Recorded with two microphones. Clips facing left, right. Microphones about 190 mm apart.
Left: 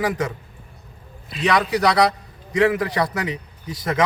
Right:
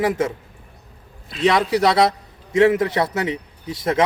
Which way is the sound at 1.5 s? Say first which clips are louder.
Right 2 dB; 25° right (ahead or behind).